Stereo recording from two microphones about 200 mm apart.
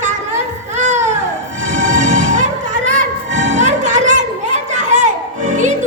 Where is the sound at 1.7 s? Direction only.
40° right (ahead or behind).